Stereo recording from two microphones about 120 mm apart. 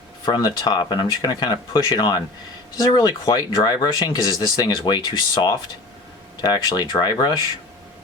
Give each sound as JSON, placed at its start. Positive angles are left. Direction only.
{"t": 0.3, "sound": "speech", "side_deg": 35}